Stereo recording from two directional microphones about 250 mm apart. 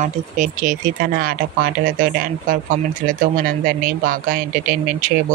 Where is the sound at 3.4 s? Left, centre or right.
Right.